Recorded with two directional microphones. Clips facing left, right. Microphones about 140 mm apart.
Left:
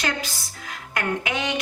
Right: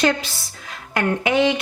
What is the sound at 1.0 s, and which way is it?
Speech, 30° right (ahead or behind).